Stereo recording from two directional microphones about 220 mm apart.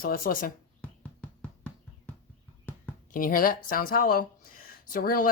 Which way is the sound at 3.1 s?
40° left (ahead or behind).